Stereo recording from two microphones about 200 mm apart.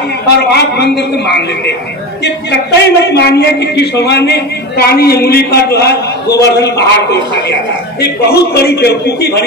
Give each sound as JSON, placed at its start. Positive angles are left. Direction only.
{"t": 0.5, "sound": "a man's voice", "side_deg": 55}